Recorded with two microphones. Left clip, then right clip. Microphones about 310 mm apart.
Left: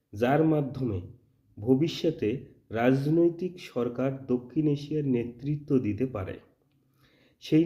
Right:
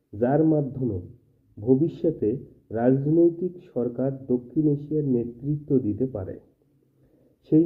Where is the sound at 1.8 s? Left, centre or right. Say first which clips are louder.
Right 4 dB; centre.